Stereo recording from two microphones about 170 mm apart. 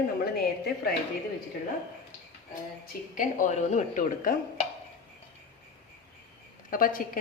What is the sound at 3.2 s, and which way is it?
Speech, 50° left (ahead or behind).